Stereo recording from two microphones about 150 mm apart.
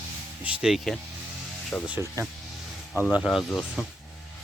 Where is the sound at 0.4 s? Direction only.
5° right (ahead or behind).